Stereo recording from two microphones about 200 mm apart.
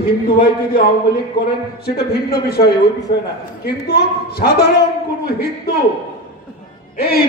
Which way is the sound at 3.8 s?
50° left (ahead or behind).